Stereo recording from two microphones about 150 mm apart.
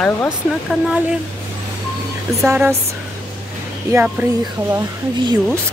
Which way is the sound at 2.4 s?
15° right (ahead or behind).